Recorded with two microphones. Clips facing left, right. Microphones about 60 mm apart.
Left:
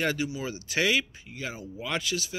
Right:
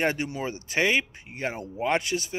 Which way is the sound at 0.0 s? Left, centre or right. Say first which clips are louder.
Right 2 dB; right.